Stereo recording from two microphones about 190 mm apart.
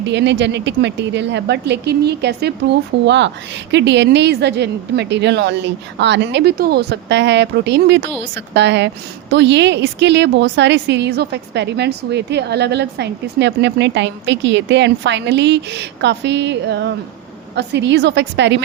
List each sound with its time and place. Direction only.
0.0 s a woman's voice: 65° right (ahead or behind)